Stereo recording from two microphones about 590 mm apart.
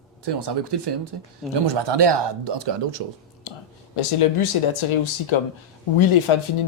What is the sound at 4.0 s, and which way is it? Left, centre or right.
Speech, left.